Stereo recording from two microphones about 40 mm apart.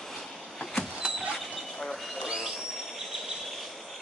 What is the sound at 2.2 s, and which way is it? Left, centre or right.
Train, right.